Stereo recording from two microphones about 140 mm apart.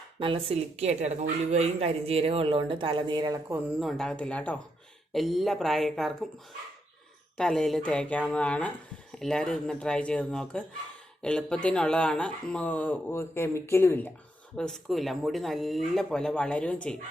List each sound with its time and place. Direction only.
0.2 s a woman's voice: 40° right (ahead or behind)
3.8 s speech: centre (ahead or behind)
5.1 s speech: centre (ahead or behind)
7.3 s speech: 5° left (ahead or behind)
14.5 s speech: 5° left (ahead or behind)